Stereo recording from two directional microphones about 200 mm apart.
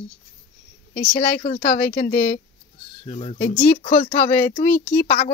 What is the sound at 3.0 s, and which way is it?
Speech, 30° left (ahead or behind).